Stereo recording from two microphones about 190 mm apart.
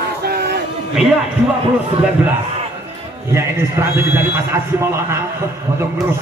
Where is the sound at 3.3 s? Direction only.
15° right (ahead or behind).